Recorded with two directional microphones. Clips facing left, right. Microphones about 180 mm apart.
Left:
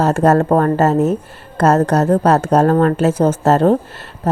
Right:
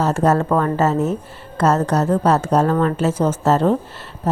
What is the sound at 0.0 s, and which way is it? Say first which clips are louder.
Speech: left 4 dB; 60° left (ahead or behind).